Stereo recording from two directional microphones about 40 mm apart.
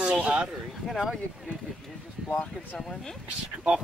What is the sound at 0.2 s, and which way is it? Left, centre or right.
Speech, right.